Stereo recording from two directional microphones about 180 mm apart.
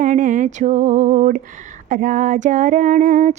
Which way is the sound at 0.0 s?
45° right (ahead or behind).